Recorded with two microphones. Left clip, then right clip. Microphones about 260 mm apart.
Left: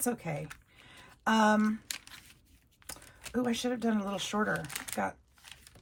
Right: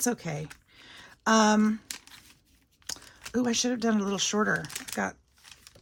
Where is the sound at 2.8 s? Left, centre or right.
Centre.